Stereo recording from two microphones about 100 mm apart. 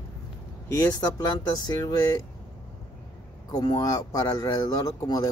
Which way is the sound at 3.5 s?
45° left (ahead or behind).